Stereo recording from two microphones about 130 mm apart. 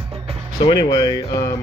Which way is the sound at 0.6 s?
35° left (ahead or behind).